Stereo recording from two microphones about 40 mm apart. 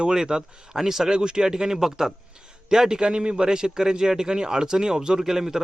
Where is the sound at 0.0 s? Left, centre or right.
Centre.